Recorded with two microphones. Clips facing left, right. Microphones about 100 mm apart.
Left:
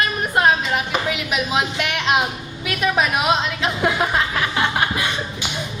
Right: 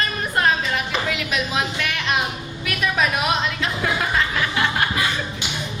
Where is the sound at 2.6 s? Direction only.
25° left (ahead or behind).